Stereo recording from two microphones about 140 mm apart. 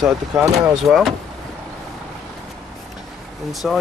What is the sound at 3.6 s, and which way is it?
Speech, 5° left (ahead or behind).